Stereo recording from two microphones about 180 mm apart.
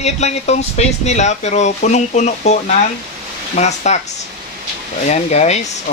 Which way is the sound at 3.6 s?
40° left (ahead or behind).